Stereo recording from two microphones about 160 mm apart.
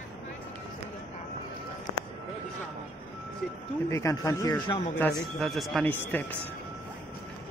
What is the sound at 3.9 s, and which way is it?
Speech, 20° left (ahead or behind).